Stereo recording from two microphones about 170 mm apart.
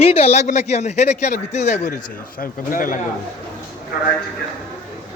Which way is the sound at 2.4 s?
55° left (ahead or behind).